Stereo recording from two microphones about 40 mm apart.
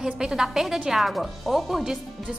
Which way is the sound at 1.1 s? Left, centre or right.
Centre.